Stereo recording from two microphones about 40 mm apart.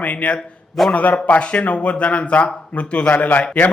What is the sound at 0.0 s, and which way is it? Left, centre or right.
A man's voice, left.